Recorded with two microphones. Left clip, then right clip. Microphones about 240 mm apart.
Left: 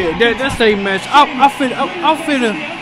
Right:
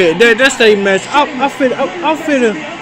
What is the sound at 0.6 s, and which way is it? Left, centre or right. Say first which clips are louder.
Speech: right 4 dB; centre.